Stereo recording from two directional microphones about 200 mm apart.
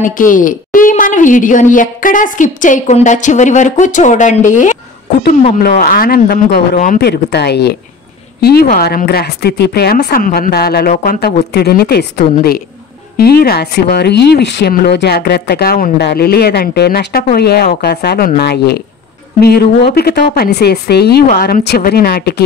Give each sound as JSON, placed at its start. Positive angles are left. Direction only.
{"t": 0.0, "sound": "a woman's voice", "side_deg": 40}
{"t": 5.6, "sound": "speech", "side_deg": 50}